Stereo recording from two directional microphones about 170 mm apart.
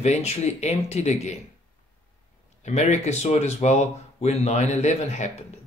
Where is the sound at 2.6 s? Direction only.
40° left (ahead or behind).